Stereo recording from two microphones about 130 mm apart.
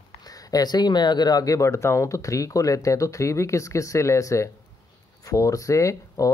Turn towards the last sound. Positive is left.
turn(degrees=25)  # may be behind; listen again after turning